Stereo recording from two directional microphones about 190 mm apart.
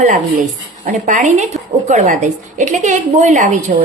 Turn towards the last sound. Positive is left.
turn(degrees=-40)  # may be behind; listen again after turning